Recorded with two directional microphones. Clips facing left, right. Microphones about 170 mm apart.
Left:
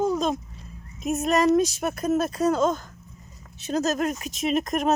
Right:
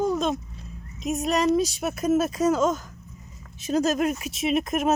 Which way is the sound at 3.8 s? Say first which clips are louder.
Even; 10° right (ahead or behind).